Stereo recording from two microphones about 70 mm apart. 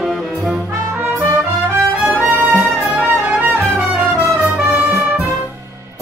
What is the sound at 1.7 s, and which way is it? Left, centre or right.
Music, right.